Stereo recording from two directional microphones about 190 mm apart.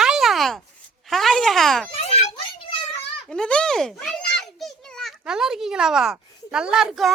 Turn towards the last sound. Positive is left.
turn(degrees=0)  # may be behind; listen again after turning